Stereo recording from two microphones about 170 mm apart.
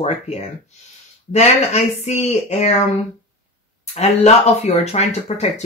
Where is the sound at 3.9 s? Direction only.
40° left (ahead or behind).